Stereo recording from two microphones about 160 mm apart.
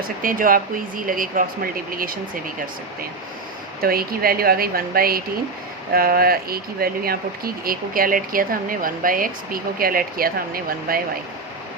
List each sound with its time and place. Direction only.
0.2 s speech: 60° right (ahead or behind)